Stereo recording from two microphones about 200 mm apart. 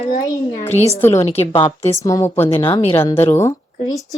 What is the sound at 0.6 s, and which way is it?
Speech, 35° left (ahead or behind).